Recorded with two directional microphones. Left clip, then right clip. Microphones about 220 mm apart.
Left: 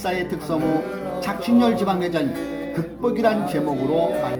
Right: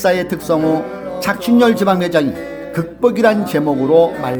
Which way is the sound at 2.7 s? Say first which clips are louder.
Right 10 dB; 50° right (ahead or behind).